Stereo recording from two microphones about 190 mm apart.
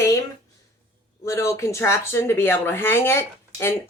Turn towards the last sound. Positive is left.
turn(degrees=15)  # may be behind; listen again after turning